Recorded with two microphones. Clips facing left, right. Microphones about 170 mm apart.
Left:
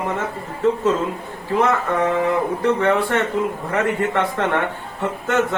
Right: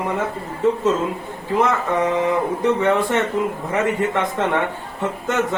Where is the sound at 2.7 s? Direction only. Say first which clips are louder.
Even; centre (ahead or behind).